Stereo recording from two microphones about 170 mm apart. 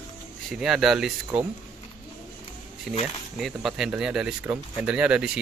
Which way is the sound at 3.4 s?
Centre (ahead or behind).